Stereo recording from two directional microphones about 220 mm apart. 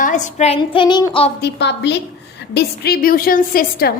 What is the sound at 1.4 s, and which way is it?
A woman's voice, 50° left (ahead or behind).